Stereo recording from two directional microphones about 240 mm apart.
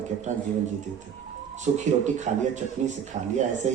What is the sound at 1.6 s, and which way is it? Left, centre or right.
Speech, right.